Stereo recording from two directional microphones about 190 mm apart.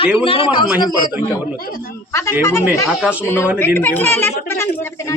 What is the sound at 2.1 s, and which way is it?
Speech, 15° left (ahead or behind).